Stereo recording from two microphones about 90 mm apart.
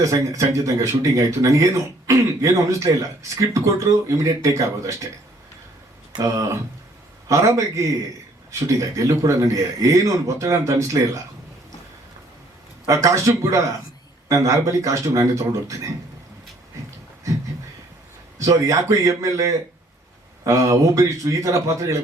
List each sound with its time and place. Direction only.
0.0 s speech: 35° right (ahead or behind)
6.1 s speech: 40° right (ahead or behind)
12.9 s speech: 35° right (ahead or behind)
18.3 s speech: 40° right (ahead or behind)